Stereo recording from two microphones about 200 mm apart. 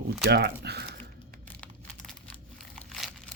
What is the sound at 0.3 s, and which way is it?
Speech, 55° right (ahead or behind).